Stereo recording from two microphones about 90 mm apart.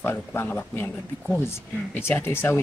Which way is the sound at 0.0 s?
25° left (ahead or behind).